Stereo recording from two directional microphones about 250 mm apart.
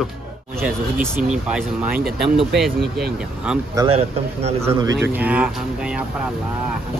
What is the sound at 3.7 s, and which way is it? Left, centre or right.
Speech, right.